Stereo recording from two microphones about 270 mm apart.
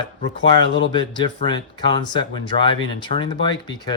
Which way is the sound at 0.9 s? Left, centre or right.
Centre.